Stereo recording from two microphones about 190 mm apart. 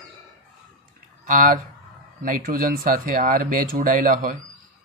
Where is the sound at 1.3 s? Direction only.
45° right (ahead or behind).